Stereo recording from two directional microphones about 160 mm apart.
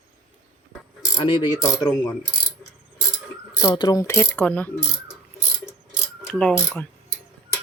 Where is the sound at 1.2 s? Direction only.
35° left (ahead or behind).